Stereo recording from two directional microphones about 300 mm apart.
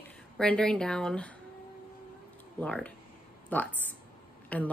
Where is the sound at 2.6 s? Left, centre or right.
Centre.